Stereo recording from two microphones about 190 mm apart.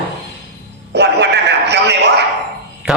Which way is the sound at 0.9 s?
65° right (ahead or behind).